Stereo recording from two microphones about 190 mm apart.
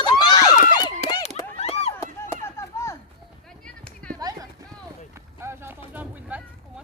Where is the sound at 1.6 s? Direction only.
35° left (ahead or behind).